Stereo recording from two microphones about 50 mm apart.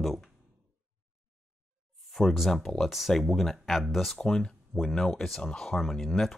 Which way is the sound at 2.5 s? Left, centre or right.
Centre.